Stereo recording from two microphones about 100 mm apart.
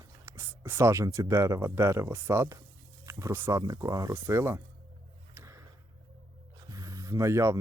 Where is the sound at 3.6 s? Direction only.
40° right (ahead or behind).